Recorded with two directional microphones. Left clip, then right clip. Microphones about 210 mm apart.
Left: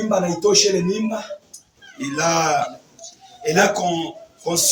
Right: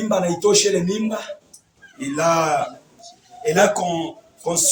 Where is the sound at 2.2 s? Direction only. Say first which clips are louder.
Even; 35° right (ahead or behind).